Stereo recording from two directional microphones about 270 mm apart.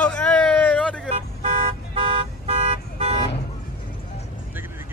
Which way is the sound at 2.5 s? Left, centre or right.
Right.